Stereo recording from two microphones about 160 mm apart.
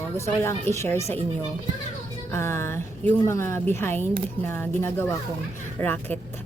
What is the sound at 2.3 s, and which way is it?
A woman's voice, 15° left (ahead or behind).